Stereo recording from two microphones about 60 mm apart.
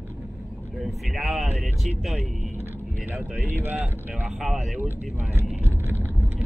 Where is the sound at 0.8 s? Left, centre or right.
Centre.